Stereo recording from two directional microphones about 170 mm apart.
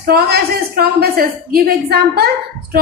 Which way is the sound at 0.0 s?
65° right (ahead or behind).